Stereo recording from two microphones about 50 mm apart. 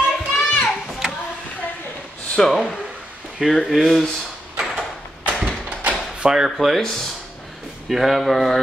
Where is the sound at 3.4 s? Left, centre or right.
Centre.